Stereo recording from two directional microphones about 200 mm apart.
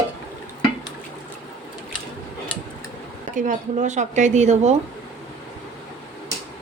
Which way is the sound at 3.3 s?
40° right (ahead or behind).